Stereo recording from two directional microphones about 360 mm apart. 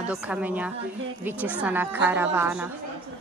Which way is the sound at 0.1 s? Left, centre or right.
Centre.